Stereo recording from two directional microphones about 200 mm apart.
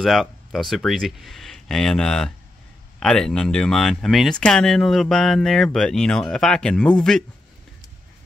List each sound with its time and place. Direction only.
0.0 s speech: centre (ahead or behind)